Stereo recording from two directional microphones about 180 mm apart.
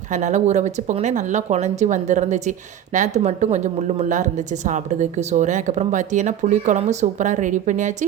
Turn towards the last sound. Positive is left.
turn(degrees=-45)  # may be behind; listen again after turning